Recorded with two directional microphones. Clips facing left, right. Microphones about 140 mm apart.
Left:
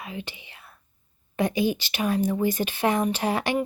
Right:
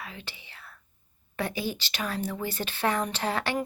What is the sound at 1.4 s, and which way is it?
Speech, 15° left (ahead or behind).